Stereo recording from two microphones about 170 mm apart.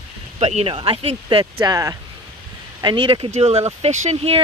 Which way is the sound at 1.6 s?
20° right (ahead or behind).